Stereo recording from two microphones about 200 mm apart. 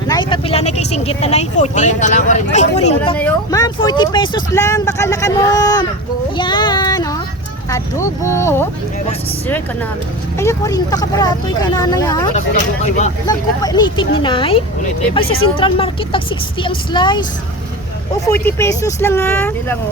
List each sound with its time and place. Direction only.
0.1 s speech: 25° left (ahead or behind)
3.5 s speech: 20° left (ahead or behind)
6.3 s a sound: 25° left (ahead or behind)
7.7 s speech: 15° left (ahead or behind)
10.3 s speech: 15° left (ahead or behind)
12.3 s speech: 35° left (ahead or behind)
13.2 s speech: 20° left (ahead or behind)
18.3 s speech: 10° left (ahead or behind)